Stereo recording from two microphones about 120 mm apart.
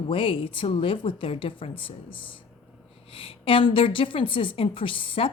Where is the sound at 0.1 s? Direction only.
50° left (ahead or behind).